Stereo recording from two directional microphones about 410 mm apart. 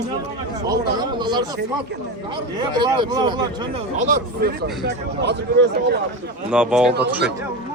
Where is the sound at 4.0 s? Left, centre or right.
Right.